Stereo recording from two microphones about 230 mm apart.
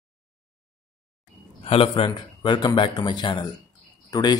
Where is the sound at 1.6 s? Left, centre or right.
Left.